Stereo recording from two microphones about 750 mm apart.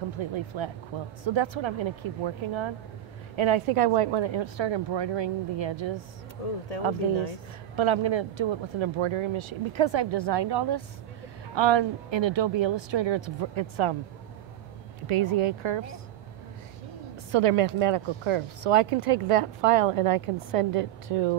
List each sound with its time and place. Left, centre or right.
0.2 s speech: right
6.4 s speech: left
7.7 s speech: right
15.0 s speech: right
17.3 s speech: right